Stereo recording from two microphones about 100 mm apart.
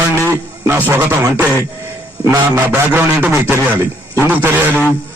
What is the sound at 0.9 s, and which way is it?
Speech, 20° right (ahead or behind).